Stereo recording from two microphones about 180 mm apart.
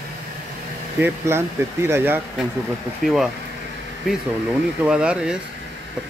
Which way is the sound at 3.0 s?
Centre (ahead or behind).